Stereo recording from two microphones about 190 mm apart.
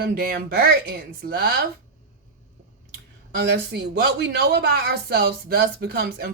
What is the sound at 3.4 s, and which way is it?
Speech, 65° right (ahead or behind).